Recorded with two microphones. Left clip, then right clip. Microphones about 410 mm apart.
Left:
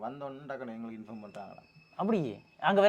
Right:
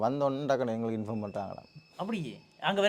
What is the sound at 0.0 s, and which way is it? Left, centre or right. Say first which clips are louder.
Speech: right 11 dB; right.